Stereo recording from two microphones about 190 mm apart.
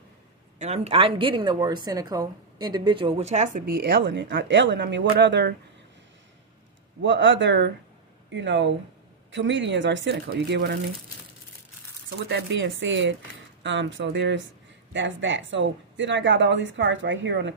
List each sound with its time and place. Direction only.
0.6 s a woman's voice: 35° right (ahead or behind); by 5.5 s 70° right (ahead or behind)
7.0 s speech: 75° right (ahead or behind)
12.3 s speech: 70° right (ahead or behind)